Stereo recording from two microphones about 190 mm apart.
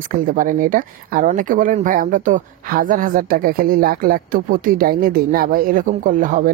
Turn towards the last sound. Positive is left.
turn(degrees=-45)  # may be behind; listen again after turning